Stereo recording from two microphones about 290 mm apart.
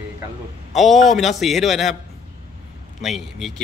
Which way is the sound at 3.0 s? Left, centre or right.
Centre.